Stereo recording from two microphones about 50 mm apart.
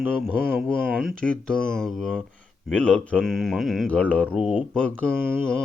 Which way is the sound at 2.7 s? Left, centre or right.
Left.